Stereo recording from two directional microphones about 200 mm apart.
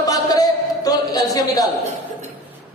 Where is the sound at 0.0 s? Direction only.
20° left (ahead or behind).